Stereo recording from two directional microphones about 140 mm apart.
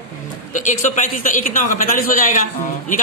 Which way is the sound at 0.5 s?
65° left (ahead or behind).